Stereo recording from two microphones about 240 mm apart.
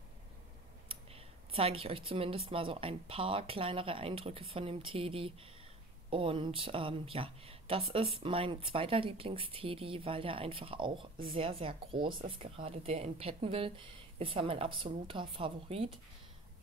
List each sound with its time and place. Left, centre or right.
1.5 s speech: right